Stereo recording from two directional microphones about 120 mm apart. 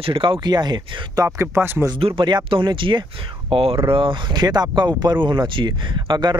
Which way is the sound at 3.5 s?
55° right (ahead or behind).